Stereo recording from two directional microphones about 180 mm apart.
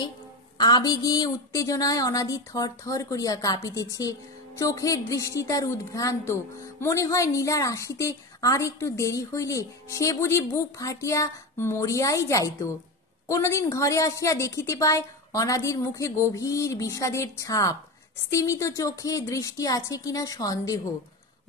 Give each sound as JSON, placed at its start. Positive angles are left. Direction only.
{"t": 0.6, "sound": "a woman's voice", "side_deg": 20}